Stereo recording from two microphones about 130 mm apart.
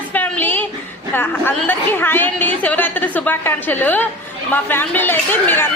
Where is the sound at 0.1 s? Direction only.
15° left (ahead or behind).